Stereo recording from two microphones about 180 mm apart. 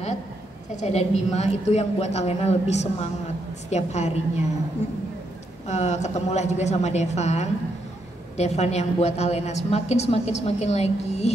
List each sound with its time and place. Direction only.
0.7 s a woman's voice: 40° left (ahead or behind)
5.7 s a woman's voice: 40° left (ahead or behind)